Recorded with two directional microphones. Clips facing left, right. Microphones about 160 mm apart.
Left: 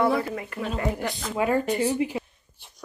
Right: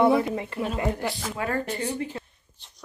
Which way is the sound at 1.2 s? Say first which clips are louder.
Left 8 dB; 20° left (ahead or behind).